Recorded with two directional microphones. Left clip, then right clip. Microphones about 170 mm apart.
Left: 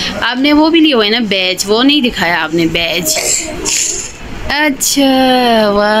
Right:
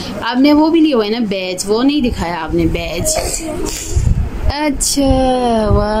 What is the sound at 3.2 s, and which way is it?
Speech, 60° right (ahead or behind).